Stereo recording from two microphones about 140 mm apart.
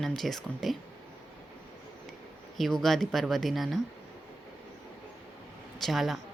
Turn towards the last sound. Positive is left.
turn(degrees=0)  # may be behind; listen again after turning